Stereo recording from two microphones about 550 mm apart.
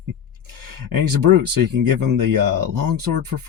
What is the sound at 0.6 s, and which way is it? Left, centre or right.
Speech, right.